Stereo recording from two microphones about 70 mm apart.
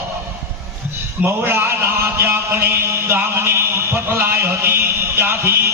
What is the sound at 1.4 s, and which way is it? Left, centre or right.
A man's voice, right.